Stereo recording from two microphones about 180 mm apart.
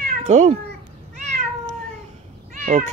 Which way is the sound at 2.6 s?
40° right (ahead or behind).